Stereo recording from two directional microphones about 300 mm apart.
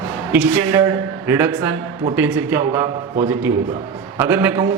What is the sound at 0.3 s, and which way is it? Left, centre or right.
A woman's voice, centre.